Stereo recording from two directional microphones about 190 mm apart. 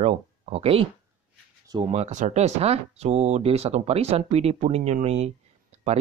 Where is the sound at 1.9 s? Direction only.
40° right (ahead or behind).